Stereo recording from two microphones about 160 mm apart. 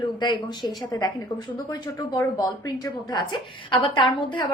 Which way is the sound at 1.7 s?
20° left (ahead or behind).